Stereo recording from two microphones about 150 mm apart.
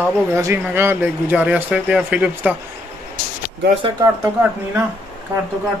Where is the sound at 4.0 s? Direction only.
15° right (ahead or behind).